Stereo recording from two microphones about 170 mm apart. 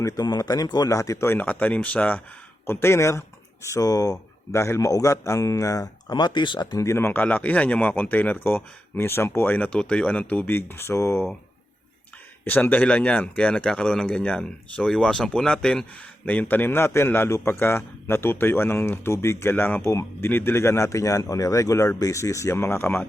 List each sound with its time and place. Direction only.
0.0 s speech: 20° left (ahead or behind)
12.5 s speech: 10° left (ahead or behind)